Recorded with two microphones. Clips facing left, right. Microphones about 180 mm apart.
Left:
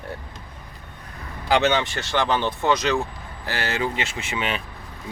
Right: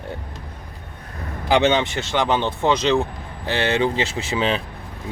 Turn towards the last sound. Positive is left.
turn(degrees=-30)  # may be behind; listen again after turning